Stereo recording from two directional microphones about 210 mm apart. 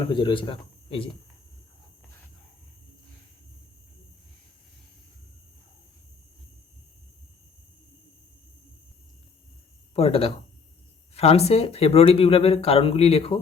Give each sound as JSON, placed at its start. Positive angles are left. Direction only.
{"t": 0.0, "sound": "speech", "side_deg": 20}
{"t": 9.9, "sound": "speech", "side_deg": 25}